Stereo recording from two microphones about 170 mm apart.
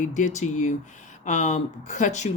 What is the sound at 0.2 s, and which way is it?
Speech, 45° left (ahead or behind).